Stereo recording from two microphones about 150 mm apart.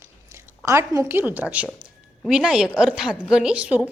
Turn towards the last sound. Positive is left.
turn(degrees=-10)  # may be behind; listen again after turning